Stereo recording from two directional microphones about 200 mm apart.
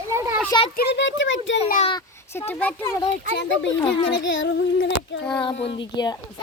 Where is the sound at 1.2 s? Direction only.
70° left (ahead or behind).